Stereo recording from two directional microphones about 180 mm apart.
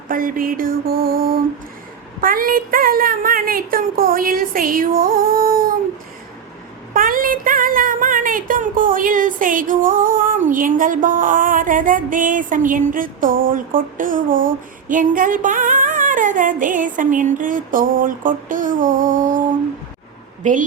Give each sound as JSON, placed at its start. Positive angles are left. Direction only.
{"t": 0.1, "sound": "speech", "side_deg": -50}
{"t": 6.9, "sound": "speech", "side_deg": -50}
{"t": 20.4, "sound": "speech", "side_deg": -45}